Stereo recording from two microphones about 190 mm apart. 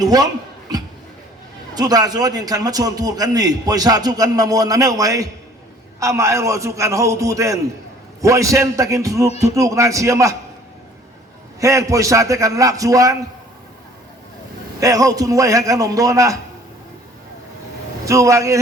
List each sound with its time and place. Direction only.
0.0 s a man's voice: 20° right (ahead or behind)
1.7 s a man's voice: 20° right (ahead or behind)
11.6 s a man's voice: 15° right (ahead or behind)
14.8 s a man's voice: 20° right (ahead or behind)
18.0 s a man's voice: 15° right (ahead or behind)